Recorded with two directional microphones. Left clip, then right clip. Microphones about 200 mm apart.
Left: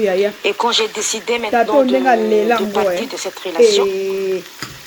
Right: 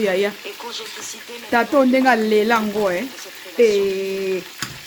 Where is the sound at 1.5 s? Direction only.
5° right (ahead or behind).